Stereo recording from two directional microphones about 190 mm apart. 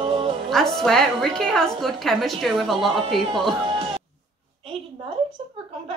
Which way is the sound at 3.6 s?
30° right (ahead or behind).